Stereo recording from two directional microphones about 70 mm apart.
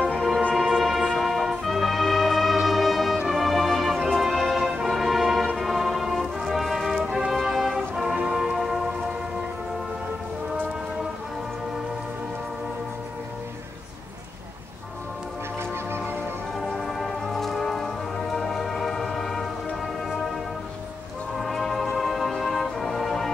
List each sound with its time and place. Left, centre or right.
0.7 s music: centre
5.6 s brass instrument: centre
7.1 s music: centre
15.7 s music: right
16.5 s music: centre
21.4 s music: centre